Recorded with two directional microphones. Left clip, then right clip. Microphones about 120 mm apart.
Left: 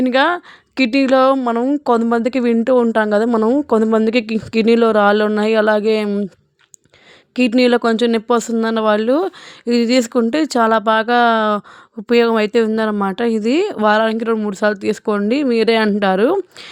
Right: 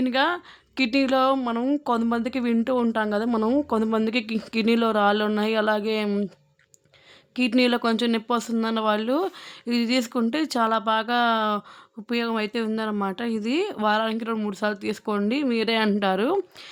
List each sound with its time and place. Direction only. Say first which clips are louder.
0.0 s speech: left 8 dB; 60° left (ahead or behind)
1.4 s speech: left 8 dB; 35° left (ahead or behind)
1.8 s speech: left 9 dB; 45° left (ahead or behind)
3.0 s speech: left 10 dB; 55° left (ahead or behind)
3.2 s speech: left 8 dB; 35° left (ahead or behind)
3.7 s speech: left 10 dB; 45° left (ahead or behind)
7.5 s speech: left 8 dB; 40° left (ahead or behind)
12.0 s speech: left 13 dB; 60° left (ahead or behind); by 16.3 s 45° left (ahead or behind)